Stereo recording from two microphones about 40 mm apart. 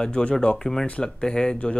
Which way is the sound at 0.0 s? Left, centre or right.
Left.